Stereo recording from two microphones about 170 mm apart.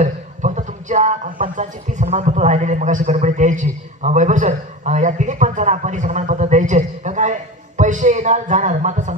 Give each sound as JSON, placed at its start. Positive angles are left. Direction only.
{"t": 0.0, "sound": "a man's voice", "side_deg": -45}